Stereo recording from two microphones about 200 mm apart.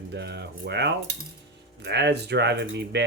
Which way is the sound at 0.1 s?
55° right (ahead or behind).